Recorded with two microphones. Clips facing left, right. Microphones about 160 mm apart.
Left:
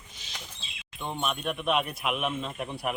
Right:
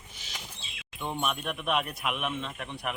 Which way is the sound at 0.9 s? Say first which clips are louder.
Even; 5° right (ahead or behind).